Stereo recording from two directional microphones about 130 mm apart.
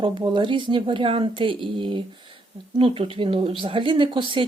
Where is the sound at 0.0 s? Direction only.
40° right (ahead or behind).